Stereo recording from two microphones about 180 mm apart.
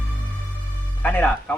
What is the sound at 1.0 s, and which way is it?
Music, 10° left (ahead or behind).